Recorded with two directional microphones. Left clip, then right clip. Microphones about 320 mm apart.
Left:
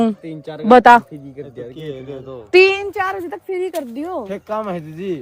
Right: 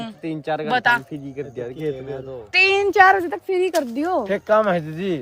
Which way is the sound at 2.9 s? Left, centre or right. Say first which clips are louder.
Right 8 dB; right.